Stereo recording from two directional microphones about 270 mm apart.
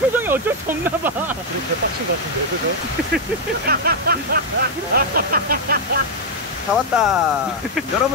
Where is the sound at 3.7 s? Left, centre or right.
Right.